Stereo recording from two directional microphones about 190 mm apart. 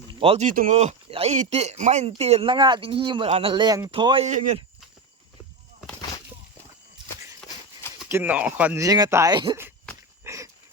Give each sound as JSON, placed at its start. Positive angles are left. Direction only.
{"t": 0.2, "sound": "speech", "side_deg": -30}
{"t": 0.4, "sound": "speech", "side_deg": -45}
{"t": 7.4, "sound": "horse", "side_deg": 5}
{"t": 8.1, "sound": "speech", "side_deg": -10}
{"t": 10.2, "sound": "a sound", "side_deg": -15}